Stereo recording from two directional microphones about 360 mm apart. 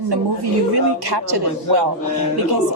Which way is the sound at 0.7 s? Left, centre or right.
Right.